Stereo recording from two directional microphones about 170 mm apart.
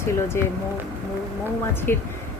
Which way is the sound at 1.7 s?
15° left (ahead or behind).